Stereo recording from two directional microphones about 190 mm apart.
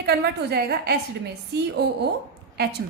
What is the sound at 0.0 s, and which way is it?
Speech, 60° right (ahead or behind).